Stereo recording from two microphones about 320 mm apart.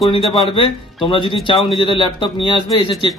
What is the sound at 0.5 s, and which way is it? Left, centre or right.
A man's voice, centre.